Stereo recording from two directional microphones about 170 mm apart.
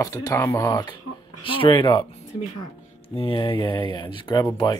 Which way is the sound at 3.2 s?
30° left (ahead or behind).